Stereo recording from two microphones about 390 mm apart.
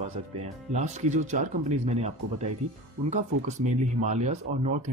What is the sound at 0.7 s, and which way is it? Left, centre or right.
Speech, centre.